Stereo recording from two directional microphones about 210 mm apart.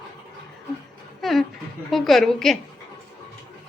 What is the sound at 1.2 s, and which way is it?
A woman's voice, centre (ahead or behind).